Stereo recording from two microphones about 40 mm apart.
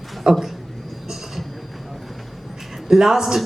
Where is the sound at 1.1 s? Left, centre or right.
Centre.